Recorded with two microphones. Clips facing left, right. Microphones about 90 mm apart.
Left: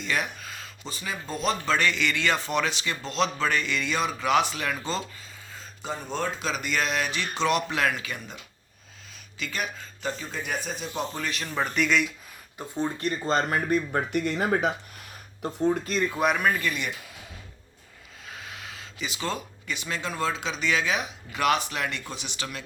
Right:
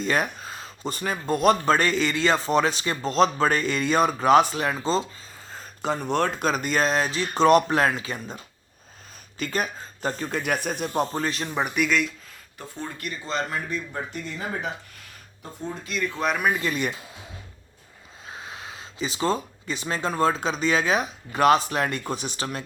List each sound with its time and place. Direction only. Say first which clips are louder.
0.0 s a sound: right 5 dB; 40° right (ahead or behind)
0.9 s speech: right 8 dB; 50° right (ahead or behind); by 5.0 s 30° right (ahead or behind)
5.5 s a sound: right 7 dB; 65° right (ahead or behind)
6.4 s speech: right 5 dB; 45° right (ahead or behind)
7.9 s speech: right 3 dB; 30° right (ahead or behind)
11.4 s speech: left 2 dB; 15° right (ahead or behind); by 12.1 s centre (ahead or behind)
12.5 s speech: left 6 dB; 20° left (ahead or behind)
13.0 s speech: left 2 dB; 40° left (ahead or behind); by 15.8 s 65° left (ahead or behind)
15.8 s speech: left 2 dB; 40° left (ahead or behind)
16.7 s speech: right 5 dB; 40° right (ahead or behind)
18.3 s speech: right 3 dB; 25° right (ahead or behind)